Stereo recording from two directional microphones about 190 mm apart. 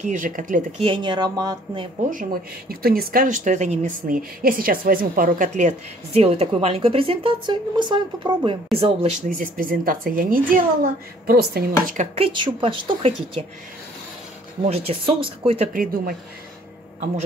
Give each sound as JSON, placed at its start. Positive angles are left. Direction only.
{"t": 0.0, "sound": "speech", "side_deg": -40}
{"t": 0.8, "sound": "a woman's voice", "side_deg": -25}
{"t": 2.7, "sound": "a woman's voice", "side_deg": -50}
{"t": 9.4, "sound": "speech", "side_deg": -50}
{"t": 12.2, "sound": "a woman's voice", "side_deg": -25}
{"t": 14.6, "sound": "a woman's voice", "side_deg": -30}
{"t": 15.7, "sound": "speech", "side_deg": -50}